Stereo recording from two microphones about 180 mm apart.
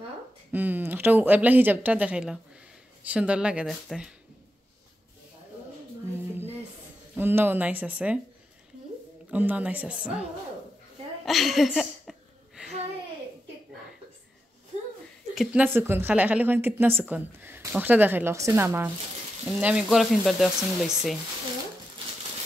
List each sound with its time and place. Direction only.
0.5 s a woman's voice: 10° right (ahead or behind)
7.2 s a woman's voice: 10° right (ahead or behind)
9.3 s a woman's voice: 10° right (ahead or behind)
11.2 s a sound: centre (ahead or behind)
14.7 s a sound: 40° right (ahead or behind)
15.3 s a woman's voice: 10° right (ahead or behind)
19.4 s speech: 5° right (ahead or behind)